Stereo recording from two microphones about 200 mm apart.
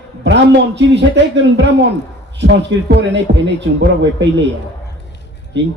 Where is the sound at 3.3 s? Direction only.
55° right (ahead or behind).